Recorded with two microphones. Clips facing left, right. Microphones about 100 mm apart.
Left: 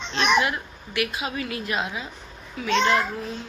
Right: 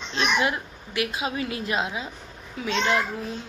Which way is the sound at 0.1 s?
20° right (ahead or behind).